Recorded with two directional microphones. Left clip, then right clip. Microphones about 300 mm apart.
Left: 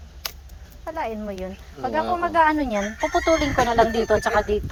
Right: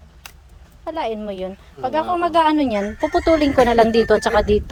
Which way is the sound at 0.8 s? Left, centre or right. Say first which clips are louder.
Right 4 dB; right.